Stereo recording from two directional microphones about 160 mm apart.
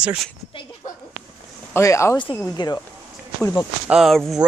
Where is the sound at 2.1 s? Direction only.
30° left (ahead or behind).